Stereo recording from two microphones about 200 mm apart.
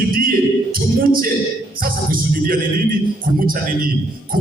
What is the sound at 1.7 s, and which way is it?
Music, 45° right (ahead or behind).